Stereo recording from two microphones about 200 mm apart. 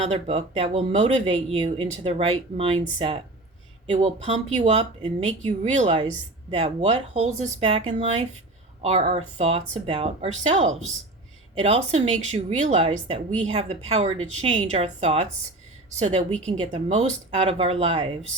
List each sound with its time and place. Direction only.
0.0 s a woman's voice: 30° right (ahead or behind)